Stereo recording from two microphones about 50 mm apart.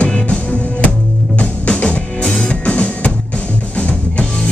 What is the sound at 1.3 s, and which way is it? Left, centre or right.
Music, left.